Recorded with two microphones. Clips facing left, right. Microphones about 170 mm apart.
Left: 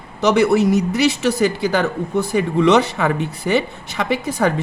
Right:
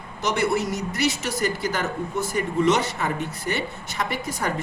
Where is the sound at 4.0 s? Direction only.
75° left (ahead or behind).